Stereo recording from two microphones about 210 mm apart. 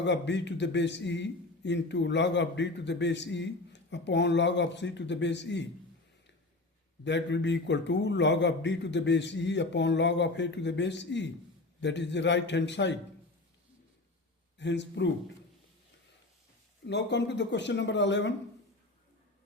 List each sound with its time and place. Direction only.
0.0 s a man's voice: 55° left (ahead or behind)
7.0 s a man's voice: 55° left (ahead or behind)
14.6 s a man's voice: 55° left (ahead or behind)
16.8 s a man's voice: 55° left (ahead or behind)